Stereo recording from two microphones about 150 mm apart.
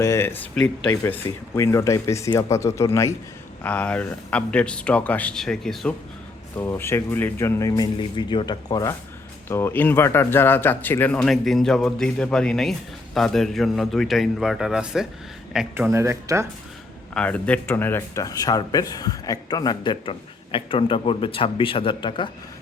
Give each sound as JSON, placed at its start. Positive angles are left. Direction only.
{"t": 0.0, "sound": "speech", "side_deg": 15}
{"t": 0.5, "sound": "a man's voice", "side_deg": 5}
{"t": 1.0, "sound": "speech", "side_deg": 15}
{"t": 6.6, "sound": "speech", "side_deg": 15}
{"t": 7.7, "sound": "a man's voice", "side_deg": 30}
{"t": 17.2, "sound": "speech", "side_deg": 10}